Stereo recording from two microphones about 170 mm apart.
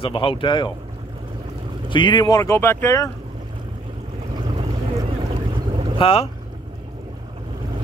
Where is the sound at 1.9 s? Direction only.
30° left (ahead or behind).